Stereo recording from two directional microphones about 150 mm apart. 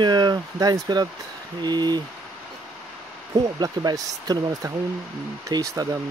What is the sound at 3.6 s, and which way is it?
Speech, 25° right (ahead or behind).